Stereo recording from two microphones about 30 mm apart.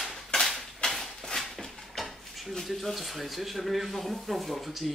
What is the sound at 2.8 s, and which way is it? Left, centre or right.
Speech, centre.